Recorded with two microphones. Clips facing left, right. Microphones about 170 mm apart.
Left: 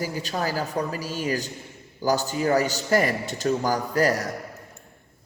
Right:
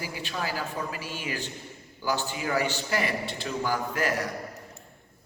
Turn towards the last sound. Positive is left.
turn(degrees=40)  # may be behind; listen again after turning